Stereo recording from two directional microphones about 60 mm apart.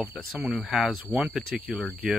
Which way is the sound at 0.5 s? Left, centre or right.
Centre.